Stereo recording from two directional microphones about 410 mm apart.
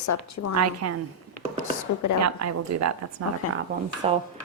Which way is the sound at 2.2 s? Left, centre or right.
Right.